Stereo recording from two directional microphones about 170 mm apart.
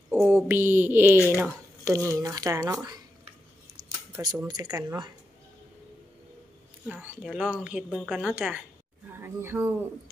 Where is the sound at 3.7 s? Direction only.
25° right (ahead or behind).